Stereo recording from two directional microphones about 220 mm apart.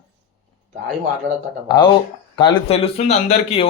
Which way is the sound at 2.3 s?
25° left (ahead or behind).